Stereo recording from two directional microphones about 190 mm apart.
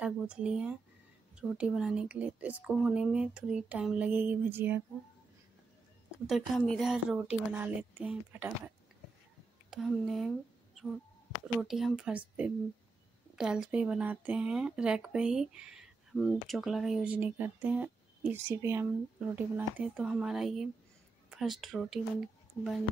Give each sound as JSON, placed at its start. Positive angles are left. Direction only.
{"t": 0.0, "sound": "speech", "side_deg": -5}
{"t": 6.5, "sound": "speech", "side_deg": 0}
{"t": 11.5, "sound": "speech", "side_deg": 0}
{"t": 13.4, "sound": "speech", "side_deg": -5}